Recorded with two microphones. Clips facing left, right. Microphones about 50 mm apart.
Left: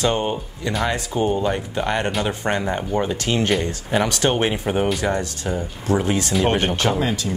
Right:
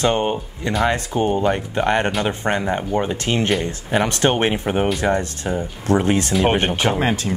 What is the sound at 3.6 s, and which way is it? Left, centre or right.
Speech, right.